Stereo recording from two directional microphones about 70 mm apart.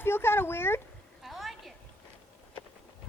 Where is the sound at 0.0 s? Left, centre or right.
Left.